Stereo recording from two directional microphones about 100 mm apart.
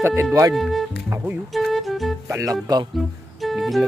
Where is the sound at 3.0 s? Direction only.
Centre (ahead or behind).